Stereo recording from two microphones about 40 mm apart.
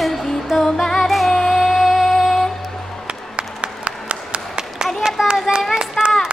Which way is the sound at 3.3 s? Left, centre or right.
Right.